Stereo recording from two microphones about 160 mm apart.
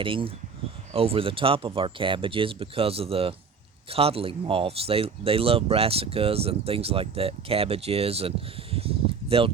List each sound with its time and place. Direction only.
0.0 s speech: 35° right (ahead or behind)